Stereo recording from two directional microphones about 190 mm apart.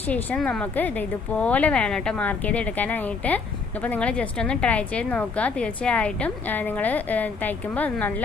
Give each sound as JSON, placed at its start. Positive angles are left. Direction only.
{"t": 0.1, "sound": "a woman's voice", "side_deg": 5}